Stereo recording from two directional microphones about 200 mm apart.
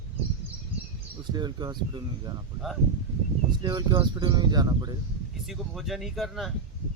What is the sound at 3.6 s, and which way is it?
Speech, 20° right (ahead or behind).